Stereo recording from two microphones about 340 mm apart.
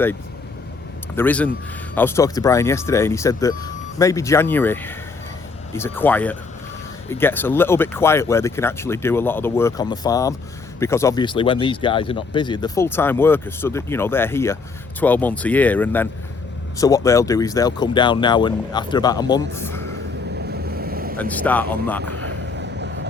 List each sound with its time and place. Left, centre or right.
1.1 s speech: centre
20.5 s boat: right
21.2 s speech: centre
22.2 s vehicle: right